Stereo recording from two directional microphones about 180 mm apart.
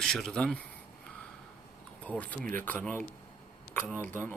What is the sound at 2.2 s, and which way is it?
Speech, 5° left (ahead or behind).